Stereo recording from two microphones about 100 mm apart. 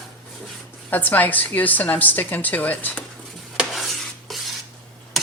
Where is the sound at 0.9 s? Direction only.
15° left (ahead or behind).